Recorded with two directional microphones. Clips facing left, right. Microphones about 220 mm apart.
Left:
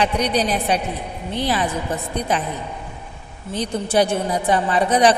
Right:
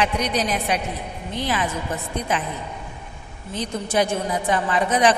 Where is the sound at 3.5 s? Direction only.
35° left (ahead or behind).